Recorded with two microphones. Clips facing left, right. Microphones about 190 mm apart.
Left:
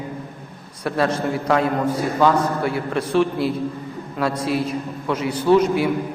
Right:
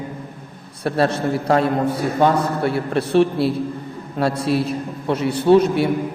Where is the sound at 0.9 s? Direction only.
30° right (ahead or behind).